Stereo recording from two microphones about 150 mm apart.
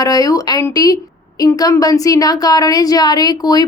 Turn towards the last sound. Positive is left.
turn(degrees=25)  # may be behind; listen again after turning